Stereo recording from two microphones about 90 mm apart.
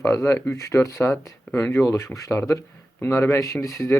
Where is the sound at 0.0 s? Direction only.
30° left (ahead or behind).